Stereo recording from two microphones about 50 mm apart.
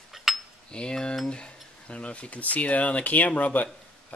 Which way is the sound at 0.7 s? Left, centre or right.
Centre.